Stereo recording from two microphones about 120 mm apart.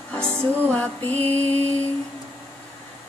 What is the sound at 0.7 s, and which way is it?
Mantra, 15° left (ahead or behind).